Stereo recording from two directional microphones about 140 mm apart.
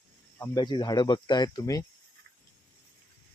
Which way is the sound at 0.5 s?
30° left (ahead or behind).